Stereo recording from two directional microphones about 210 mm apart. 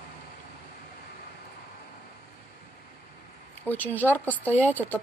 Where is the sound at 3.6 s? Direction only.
10° left (ahead or behind).